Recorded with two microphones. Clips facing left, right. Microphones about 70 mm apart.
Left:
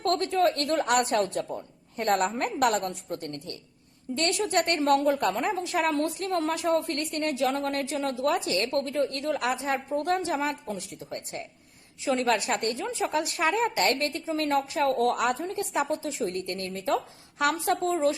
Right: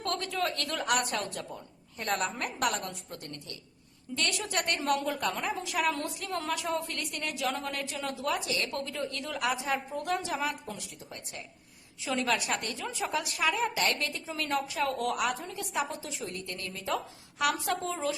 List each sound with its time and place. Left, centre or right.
0.0 s a woman's voice: left
4.4 s a woman's voice: left
8.9 s a woman's voice: left
12.0 s a woman's voice: left
16.3 s a woman's voice: left
16.7 s speech: left
17.8 s a woman's voice: left